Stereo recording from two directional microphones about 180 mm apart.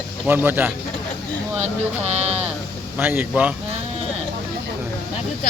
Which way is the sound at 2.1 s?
35° right (ahead or behind).